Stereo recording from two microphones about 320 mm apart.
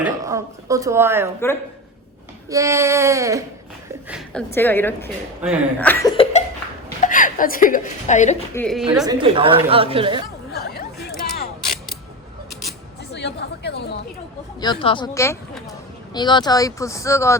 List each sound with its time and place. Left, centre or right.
0.0 s a woman's voice: centre
2.5 s a woman's voice: centre
4.1 s a woman's voice: centre; by 8.4 s left
8.5 s a woman's voice: centre
9.0 s a woman's voice: centre
13.1 s speech: left
14.6 s speech: centre